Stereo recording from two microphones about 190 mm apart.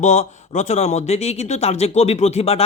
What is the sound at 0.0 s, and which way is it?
Speech, 40° left (ahead or behind).